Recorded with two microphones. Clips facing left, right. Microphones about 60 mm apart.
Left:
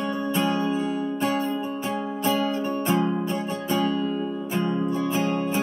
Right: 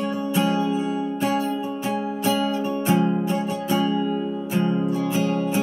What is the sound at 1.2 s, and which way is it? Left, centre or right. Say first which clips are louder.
Music: right 2 dB; left.